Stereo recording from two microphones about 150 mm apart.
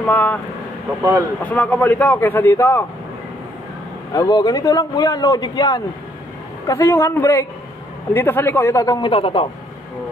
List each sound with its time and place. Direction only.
0.0 s speech: 10° left (ahead or behind)
1.4 s speech: 10° left (ahead or behind)
4.1 s a man's voice: 25° left (ahead or behind)
9.1 s a man's voice: 35° left (ahead or behind)